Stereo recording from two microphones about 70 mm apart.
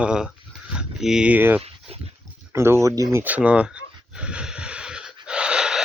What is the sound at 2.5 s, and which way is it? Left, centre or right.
Speech, right.